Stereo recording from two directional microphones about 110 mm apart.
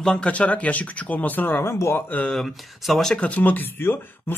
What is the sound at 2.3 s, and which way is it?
Speech, centre (ahead or behind).